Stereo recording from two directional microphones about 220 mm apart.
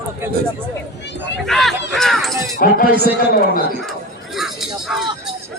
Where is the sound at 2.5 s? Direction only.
40° left (ahead or behind).